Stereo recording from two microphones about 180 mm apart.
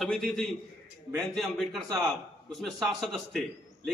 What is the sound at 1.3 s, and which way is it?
A man's voice, centre (ahead or behind).